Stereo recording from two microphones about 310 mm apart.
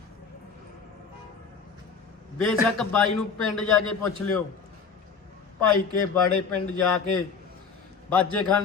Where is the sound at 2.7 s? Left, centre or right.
Centre.